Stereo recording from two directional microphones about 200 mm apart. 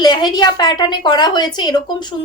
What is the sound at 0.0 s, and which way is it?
A woman's voice, 20° left (ahead or behind).